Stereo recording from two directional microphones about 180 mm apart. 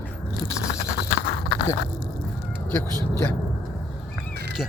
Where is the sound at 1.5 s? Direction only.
25° left (ahead or behind).